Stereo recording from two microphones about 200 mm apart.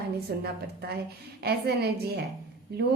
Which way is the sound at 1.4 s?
55° right (ahead or behind).